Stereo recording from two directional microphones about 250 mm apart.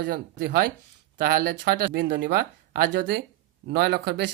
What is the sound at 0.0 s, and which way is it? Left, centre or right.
Speech, right.